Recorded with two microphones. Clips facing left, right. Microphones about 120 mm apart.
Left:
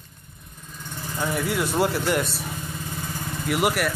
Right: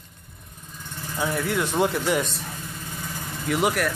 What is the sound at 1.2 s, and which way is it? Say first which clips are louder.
Speech: even; 5° left (ahead or behind).